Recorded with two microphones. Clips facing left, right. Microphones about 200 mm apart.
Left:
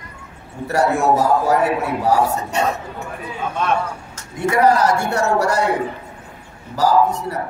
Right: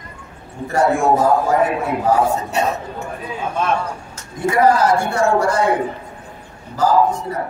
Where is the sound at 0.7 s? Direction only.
70° left (ahead or behind).